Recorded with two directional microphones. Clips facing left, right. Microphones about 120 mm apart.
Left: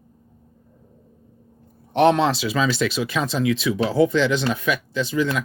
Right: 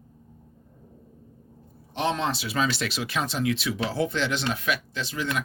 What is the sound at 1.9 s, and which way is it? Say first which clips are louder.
Speech: left 10 dB; 65° left (ahead or behind).